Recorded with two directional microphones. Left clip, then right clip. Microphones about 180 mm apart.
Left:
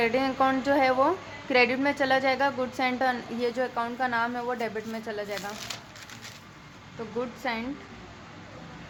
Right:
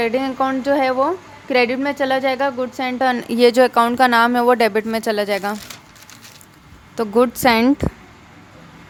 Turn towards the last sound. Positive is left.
turn(degrees=-65)  # may be behind; listen again after turning